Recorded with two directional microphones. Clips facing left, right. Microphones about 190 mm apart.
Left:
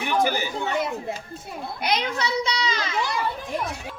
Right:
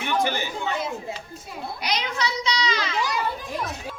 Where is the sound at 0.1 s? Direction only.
10° left (ahead or behind).